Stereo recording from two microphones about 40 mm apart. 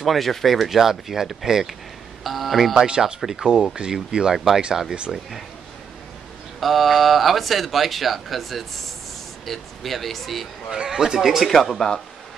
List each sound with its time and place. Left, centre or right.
0.0 s speech: centre
2.7 s speech: centre
5.1 s speech: centre
6.6 s speech: centre
10.8 s speech: centre
11.4 s speech: centre